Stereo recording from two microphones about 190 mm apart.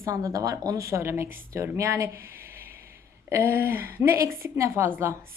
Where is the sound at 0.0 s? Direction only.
15° right (ahead or behind).